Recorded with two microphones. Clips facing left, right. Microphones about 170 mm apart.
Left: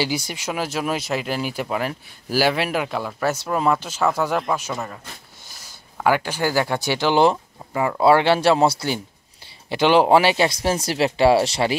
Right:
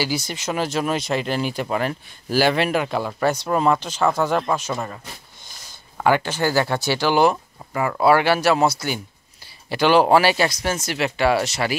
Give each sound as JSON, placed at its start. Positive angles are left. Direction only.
{"t": 0.0, "sound": "speech", "side_deg": 15}